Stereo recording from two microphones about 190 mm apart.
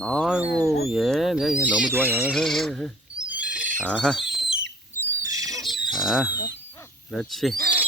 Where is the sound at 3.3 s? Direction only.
5° right (ahead or behind).